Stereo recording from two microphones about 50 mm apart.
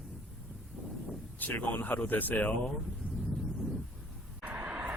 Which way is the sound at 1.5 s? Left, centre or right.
Left.